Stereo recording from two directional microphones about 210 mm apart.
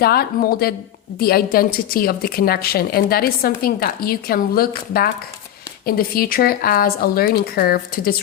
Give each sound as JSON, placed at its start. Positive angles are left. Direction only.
{"t": 0.0, "sound": "a woman's voice", "side_deg": 45}